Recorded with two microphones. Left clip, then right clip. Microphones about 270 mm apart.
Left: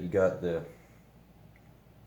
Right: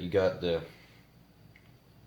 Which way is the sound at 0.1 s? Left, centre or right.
Right.